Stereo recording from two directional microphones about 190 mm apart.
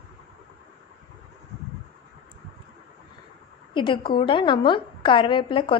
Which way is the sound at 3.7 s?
25° left (ahead or behind).